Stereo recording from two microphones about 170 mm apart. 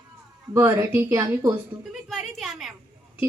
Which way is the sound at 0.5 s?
15° right (ahead or behind).